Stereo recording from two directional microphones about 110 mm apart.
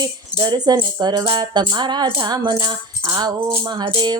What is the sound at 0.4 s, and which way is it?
Music, 40° right (ahead or behind).